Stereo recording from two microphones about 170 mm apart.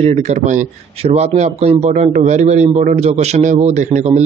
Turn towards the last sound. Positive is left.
turn(degrees=-45)  # may be behind; listen again after turning